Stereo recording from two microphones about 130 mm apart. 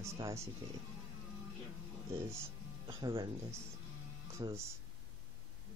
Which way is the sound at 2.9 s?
40° right (ahead or behind).